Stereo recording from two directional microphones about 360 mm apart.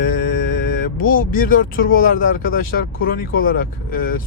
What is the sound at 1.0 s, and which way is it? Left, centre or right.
Speech, left.